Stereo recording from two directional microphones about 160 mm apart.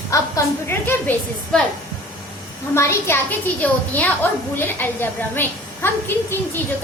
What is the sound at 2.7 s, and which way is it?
A woman's voice, 15° left (ahead or behind).